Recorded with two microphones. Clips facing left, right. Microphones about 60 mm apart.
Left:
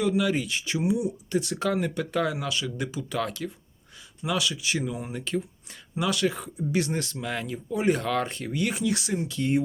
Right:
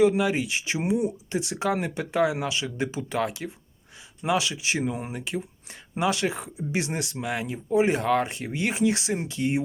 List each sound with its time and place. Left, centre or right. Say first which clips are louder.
0.0 s speech: right 4 dB; right
5.1 s speech: left 2 dB; centre
6.0 s speech: right 1 dB; right